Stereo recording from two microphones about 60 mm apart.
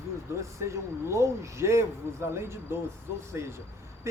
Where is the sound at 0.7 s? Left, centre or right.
Right.